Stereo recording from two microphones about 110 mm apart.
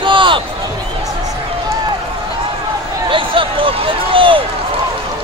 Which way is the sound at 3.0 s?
50° right (ahead or behind).